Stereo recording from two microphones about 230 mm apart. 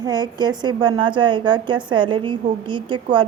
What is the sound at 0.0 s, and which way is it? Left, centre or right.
A woman's voice, centre.